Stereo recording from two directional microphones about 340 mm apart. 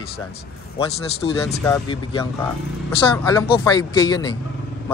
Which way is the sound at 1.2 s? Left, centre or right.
Centre.